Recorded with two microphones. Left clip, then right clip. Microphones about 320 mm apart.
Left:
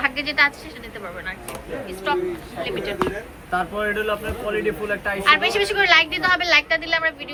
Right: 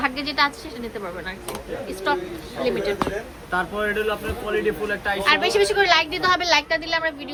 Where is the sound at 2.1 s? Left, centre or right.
Centre.